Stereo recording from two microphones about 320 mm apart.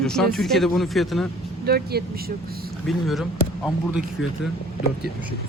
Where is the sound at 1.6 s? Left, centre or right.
Right.